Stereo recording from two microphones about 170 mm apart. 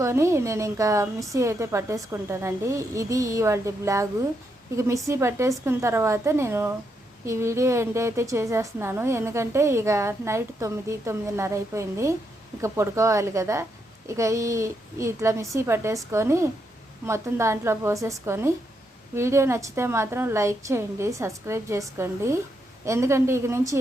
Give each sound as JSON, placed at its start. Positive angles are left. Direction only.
{"t": 0.0, "sound": "a woman's voice", "side_deg": -15}